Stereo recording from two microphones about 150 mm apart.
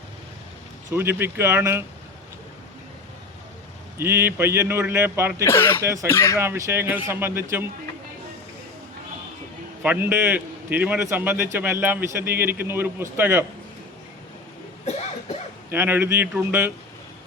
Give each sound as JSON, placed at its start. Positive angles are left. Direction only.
{"t": 0.9, "sound": "a man's voice", "side_deg": -15}
{"t": 3.9, "sound": "a man's voice", "side_deg": -15}
{"t": 5.4, "sound": "speech", "side_deg": 15}
{"t": 5.8, "sound": "speech", "side_deg": -20}
{"t": 6.1, "sound": "speech", "side_deg": 15}
{"t": 6.4, "sound": "a man's voice", "side_deg": -15}
{"t": 9.8, "sound": "a man's voice", "side_deg": -10}
{"t": 14.8, "sound": "cough", "side_deg": 45}
{"t": 15.7, "sound": "a man's voice", "side_deg": -15}